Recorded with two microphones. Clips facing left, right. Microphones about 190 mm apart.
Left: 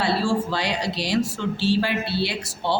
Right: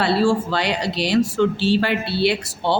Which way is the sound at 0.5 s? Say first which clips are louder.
Right 3 dB; 65° right (ahead or behind).